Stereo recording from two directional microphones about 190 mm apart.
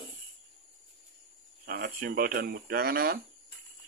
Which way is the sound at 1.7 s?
55° right (ahead or behind).